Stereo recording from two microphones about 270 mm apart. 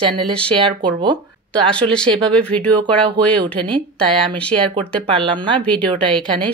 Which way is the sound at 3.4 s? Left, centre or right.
Centre.